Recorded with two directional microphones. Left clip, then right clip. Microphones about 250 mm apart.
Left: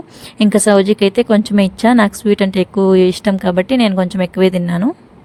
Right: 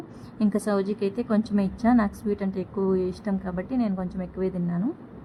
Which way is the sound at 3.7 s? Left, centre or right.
Left.